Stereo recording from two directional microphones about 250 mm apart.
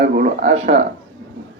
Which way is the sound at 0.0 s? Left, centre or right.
Right.